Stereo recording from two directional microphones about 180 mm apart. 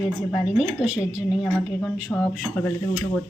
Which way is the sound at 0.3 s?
Centre (ahead or behind).